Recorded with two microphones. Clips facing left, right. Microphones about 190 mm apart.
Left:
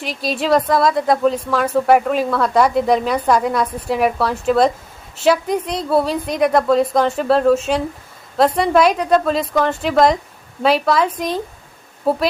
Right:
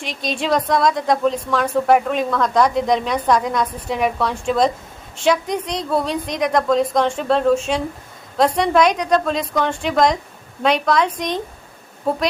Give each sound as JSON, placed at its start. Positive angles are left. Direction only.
{"t": 0.0, "sound": "a woman's voice", "side_deg": 5}